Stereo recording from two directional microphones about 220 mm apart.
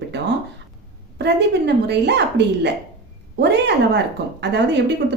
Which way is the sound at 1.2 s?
50° right (ahead or behind).